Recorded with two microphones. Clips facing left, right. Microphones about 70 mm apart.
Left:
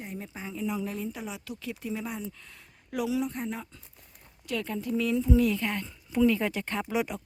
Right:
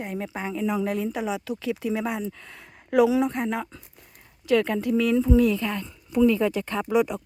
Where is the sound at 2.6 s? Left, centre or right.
Right.